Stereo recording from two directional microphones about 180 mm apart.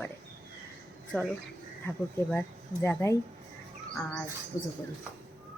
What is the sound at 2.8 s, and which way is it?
Speech, 15° left (ahead or behind).